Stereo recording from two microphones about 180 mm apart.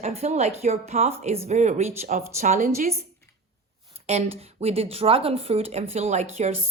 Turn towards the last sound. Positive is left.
turn(degrees=-40)  # may be behind; listen again after turning